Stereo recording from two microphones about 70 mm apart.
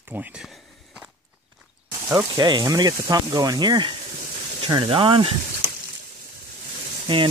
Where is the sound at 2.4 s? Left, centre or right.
Right.